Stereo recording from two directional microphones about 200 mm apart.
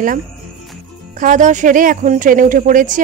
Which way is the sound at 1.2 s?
40° right (ahead or behind).